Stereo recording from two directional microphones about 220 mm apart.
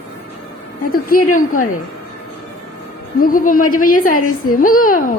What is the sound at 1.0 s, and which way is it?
Speech, 40° left (ahead or behind).